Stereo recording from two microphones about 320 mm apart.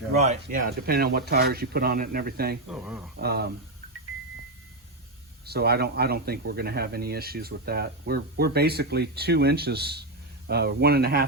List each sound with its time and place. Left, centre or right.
0.2 s speech: right
2.6 s speech: centre
3.2 s speech: right
5.5 s speech: right